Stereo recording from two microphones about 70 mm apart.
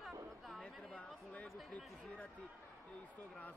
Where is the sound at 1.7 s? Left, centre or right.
Centre.